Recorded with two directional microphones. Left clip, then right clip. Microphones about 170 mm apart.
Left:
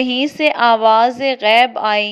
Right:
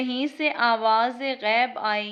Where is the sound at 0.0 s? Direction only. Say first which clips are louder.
Left 10 dB; 45° left (ahead or behind).